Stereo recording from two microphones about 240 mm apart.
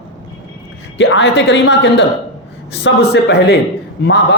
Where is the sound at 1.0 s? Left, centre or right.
Left.